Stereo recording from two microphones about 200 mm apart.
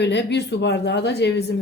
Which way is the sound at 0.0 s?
60° left (ahead or behind).